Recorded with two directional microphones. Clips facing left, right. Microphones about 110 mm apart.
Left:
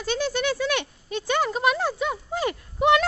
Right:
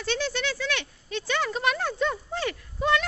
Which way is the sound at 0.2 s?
45° left (ahead or behind).